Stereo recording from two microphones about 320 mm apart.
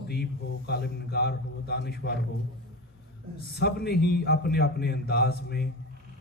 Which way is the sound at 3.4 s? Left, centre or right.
Left.